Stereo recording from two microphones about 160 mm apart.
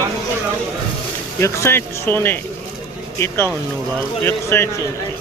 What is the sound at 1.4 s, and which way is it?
Speech, 15° left (ahead or behind).